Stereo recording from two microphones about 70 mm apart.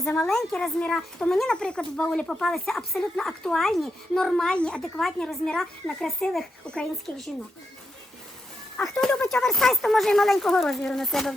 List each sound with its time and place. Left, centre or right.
0.2 s speech: centre
8.8 s speech: centre